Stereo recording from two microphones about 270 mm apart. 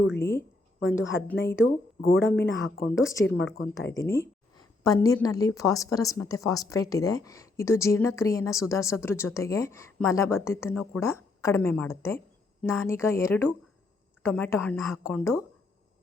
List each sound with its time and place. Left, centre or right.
0.2 s speech: centre
0.8 s a woman's voice: left
2.2 s a woman's voice: left
4.0 s speech: centre